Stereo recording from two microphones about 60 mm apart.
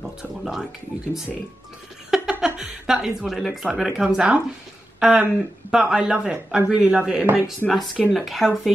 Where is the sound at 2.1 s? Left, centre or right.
Centre.